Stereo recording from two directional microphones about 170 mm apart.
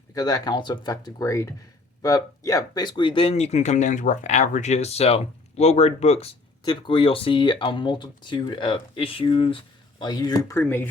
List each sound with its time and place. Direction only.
0.1 s speech: 20° left (ahead or behind)